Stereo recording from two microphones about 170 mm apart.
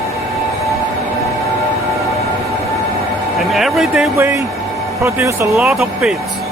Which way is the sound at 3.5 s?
Centre (ahead or behind).